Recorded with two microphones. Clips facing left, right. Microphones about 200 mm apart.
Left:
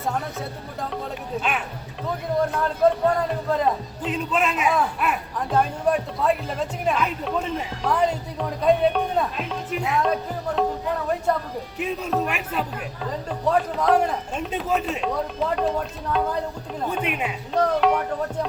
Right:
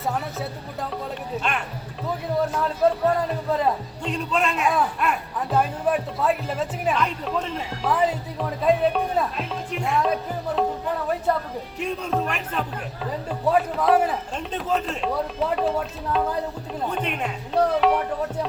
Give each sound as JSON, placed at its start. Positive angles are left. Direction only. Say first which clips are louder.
{"t": 0.0, "sound": "speech", "louder": "even", "side_deg": 0}
{"t": 13.1, "sound": "speech", "louder": "right 1 dB", "side_deg": -5}
{"t": 14.7, "sound": "speech", "louder": "even", "side_deg": 10}
{"t": 15.1, "sound": "speech", "louder": "right 3 dB", "side_deg": -5}